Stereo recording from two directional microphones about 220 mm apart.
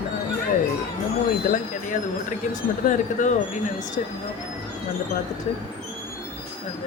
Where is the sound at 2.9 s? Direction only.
35° left (ahead or behind).